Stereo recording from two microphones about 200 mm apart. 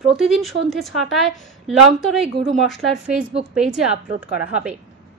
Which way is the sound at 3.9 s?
35° right (ahead or behind).